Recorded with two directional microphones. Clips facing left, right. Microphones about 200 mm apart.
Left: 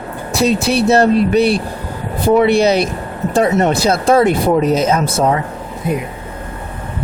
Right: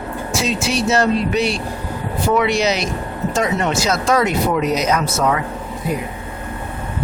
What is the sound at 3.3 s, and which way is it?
Speech, 35° left (ahead or behind).